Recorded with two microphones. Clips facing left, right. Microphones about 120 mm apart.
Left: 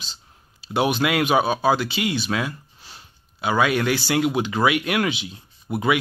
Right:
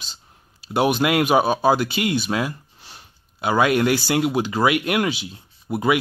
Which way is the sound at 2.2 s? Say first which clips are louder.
Right 2 dB; 10° right (ahead or behind).